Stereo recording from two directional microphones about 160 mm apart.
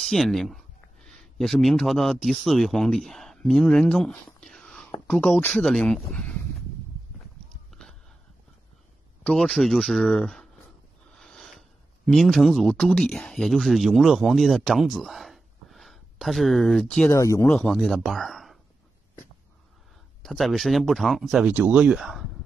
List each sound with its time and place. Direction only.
0.0 s speech: centre (ahead or behind)
9.2 s speech: 5° left (ahead or behind)
11.1 s a sound: 5° left (ahead or behind)
12.1 s speech: centre (ahead or behind)
17.1 s speech: 20° left (ahead or behind)
17.5 s speech: 5° left (ahead or behind)
20.2 s speech: centre (ahead or behind)